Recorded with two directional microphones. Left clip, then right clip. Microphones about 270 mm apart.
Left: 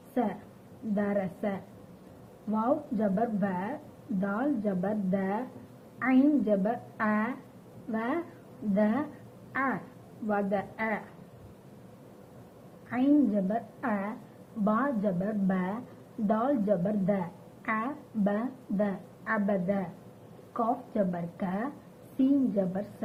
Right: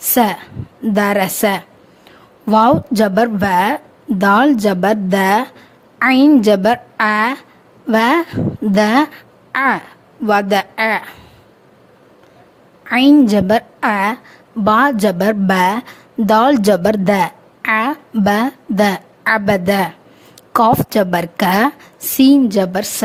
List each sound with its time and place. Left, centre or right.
0.9 s a woman's voice: right
12.9 s a woman's voice: right